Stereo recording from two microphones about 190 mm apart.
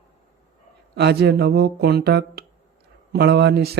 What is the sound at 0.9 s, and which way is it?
Speech, 60° right (ahead or behind).